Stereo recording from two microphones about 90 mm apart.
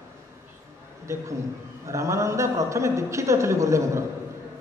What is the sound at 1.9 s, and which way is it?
A man's voice, 35° right (ahead or behind).